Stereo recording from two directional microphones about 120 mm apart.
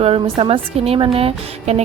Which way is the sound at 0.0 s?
55° right (ahead or behind).